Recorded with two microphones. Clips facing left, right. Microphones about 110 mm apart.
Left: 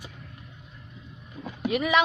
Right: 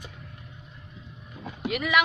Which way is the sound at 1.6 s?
25° left (ahead or behind).